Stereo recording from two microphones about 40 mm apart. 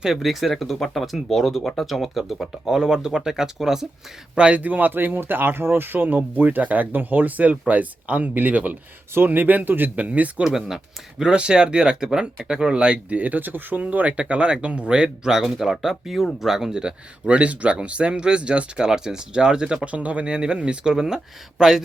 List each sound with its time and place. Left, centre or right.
0.0 s speech: centre
2.6 s speech: centre
4.4 s speech: right
4.6 s speech: right
9.9 s speech: right
10.4 s speech: centre
11.2 s speech: right
13.1 s speech: right
13.8 s speech: right
14.1 s speech: right
19.9 s speech: right
20.2 s speech: right